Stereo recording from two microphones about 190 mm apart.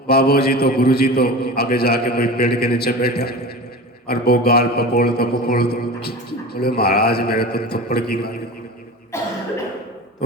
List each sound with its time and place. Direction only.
0.1 s a man's voice: 55° left (ahead or behind)
9.1 s cough: 15° left (ahead or behind)